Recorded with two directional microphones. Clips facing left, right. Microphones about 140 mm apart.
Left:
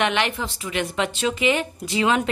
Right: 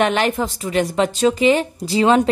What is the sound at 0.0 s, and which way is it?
A woman's voice, 40° right (ahead or behind).